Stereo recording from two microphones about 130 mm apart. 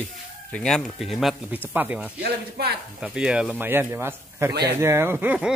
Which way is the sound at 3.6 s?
20° right (ahead or behind).